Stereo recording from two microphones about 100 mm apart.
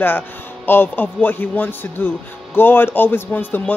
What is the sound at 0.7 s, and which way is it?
A man's voice, 20° left (ahead or behind).